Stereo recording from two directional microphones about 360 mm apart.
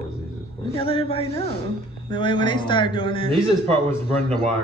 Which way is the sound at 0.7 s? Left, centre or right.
Centre.